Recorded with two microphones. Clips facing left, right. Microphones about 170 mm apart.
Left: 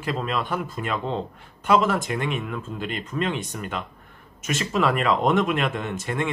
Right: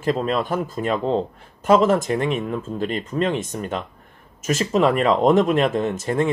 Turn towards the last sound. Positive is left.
turn(degrees=-40)  # may be behind; listen again after turning